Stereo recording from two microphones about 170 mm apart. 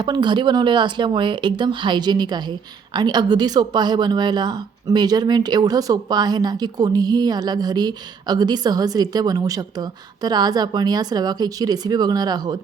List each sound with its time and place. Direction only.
0.0 s speech: 25° right (ahead or behind)